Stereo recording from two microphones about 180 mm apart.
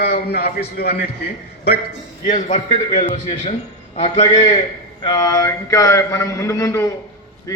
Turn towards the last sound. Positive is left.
turn(degrees=15)  # may be behind; listen again after turning